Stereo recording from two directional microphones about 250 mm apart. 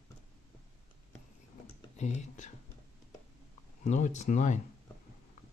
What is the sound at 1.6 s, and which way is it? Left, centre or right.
Computer keyboard, left.